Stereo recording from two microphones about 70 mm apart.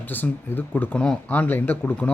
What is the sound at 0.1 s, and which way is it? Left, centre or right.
Speech, left.